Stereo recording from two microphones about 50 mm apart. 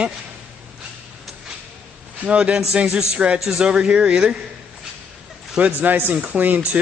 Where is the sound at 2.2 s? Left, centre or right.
Right.